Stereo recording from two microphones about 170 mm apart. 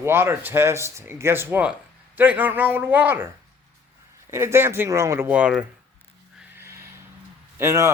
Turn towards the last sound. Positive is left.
turn(degrees=-15)  # may be behind; listen again after turning